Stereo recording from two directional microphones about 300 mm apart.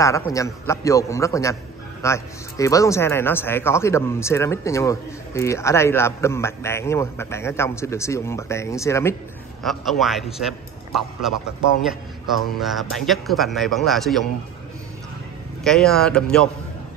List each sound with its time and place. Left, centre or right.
0.0 s a man's voice: centre
12.4 s a man's voice: centre
15.6 s a man's voice: centre